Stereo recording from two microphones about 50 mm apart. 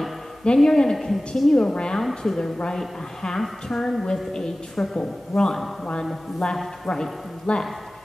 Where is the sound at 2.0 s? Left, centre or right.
Centre.